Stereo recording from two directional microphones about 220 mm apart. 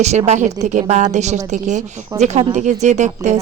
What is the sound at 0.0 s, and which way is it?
A woman's voice, 30° right (ahead or behind).